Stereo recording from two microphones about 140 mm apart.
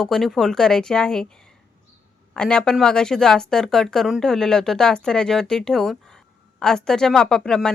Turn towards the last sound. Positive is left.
turn(degrees=5)  # may be behind; listen again after turning